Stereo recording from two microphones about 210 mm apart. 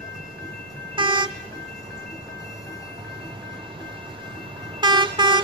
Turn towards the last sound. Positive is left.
turn(degrees=-20)  # may be behind; listen again after turning